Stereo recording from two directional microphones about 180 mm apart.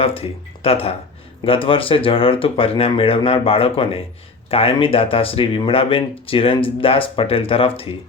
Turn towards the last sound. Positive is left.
turn(degrees=30)  # may be behind; listen again after turning